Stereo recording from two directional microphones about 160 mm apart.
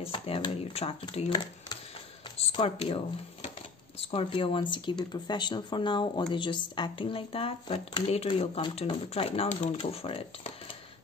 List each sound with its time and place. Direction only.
0.0 s speech: 35° left (ahead or behind)
4.1 s speech: 35° left (ahead or behind)